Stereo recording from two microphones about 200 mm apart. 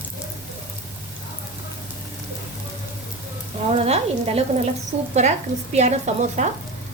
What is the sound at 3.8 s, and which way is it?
Speech, 30° right (ahead or behind).